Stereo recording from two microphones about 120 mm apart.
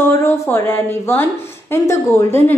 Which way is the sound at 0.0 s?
20° left (ahead or behind).